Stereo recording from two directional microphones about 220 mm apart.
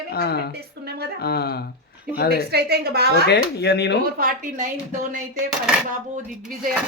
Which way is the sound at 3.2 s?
50° left (ahead or behind).